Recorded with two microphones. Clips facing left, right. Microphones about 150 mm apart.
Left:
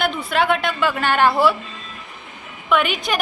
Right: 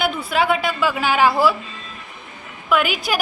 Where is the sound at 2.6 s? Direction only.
5° right (ahead or behind).